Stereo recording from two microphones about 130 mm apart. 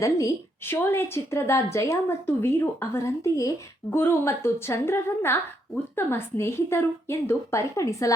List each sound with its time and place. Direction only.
0.0 s a woman's voice: 25° left (ahead or behind)